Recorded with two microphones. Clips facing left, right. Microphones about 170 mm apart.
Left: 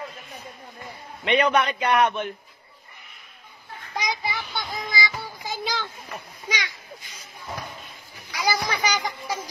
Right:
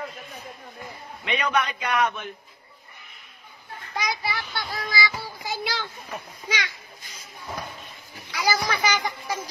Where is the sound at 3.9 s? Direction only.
20° left (ahead or behind).